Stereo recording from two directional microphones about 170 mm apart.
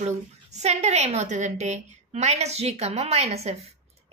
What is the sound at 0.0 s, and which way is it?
A woman's voice, 40° right (ahead or behind).